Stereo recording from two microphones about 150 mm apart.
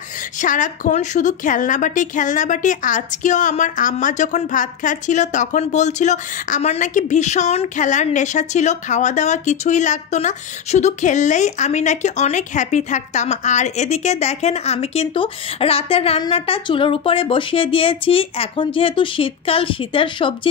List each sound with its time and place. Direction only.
0.4 s a woman's voice: 60° left (ahead or behind); by 20.3 s 35° left (ahead or behind)